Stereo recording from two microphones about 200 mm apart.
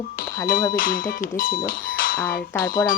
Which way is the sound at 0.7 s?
45° left (ahead or behind).